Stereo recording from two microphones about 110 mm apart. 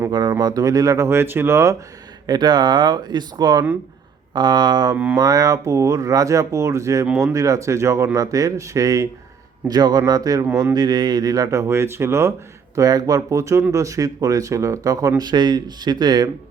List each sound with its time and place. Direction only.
0.1 s speech: 35° right (ahead or behind)
2.2 s speech: 40° right (ahead or behind); by 12.3 s 25° right (ahead or behind)
12.7 s speech: 35° right (ahead or behind)
15.2 s speech: 40° right (ahead or behind)